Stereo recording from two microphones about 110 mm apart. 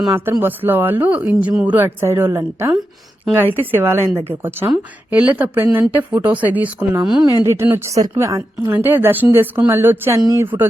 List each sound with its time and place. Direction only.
0.3 s a woman's voice: 20° right (ahead or behind)
7.0 s speech: 5° right (ahead or behind)
7.3 s a woman's voice: 25° right (ahead or behind)
10.2 s speech: 35° right (ahead or behind)
10.4 s a woman's voice: 20° right (ahead or behind)